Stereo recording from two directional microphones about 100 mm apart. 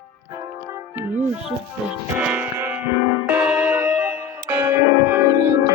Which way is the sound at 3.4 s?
10° right (ahead or behind).